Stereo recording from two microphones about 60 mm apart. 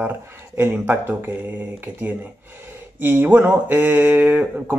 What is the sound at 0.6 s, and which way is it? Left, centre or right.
Speech, right.